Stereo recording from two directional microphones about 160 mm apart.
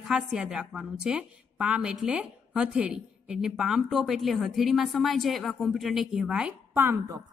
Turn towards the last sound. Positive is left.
turn(degrees=-20)  # may be behind; listen again after turning